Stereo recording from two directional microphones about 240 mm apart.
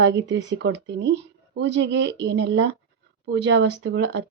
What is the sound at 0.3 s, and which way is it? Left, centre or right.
Speech, right.